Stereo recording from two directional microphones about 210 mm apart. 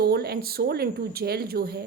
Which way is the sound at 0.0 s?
50° right (ahead or behind).